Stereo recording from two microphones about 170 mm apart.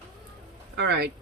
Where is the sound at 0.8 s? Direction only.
80° right.